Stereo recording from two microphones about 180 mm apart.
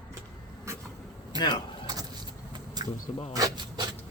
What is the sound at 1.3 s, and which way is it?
Speech, 20° right (ahead or behind).